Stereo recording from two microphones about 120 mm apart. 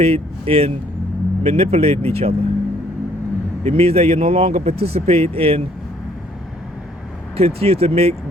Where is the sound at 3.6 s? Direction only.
55° right (ahead or behind).